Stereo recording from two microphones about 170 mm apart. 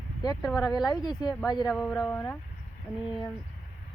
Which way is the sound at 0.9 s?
25° left (ahead or behind).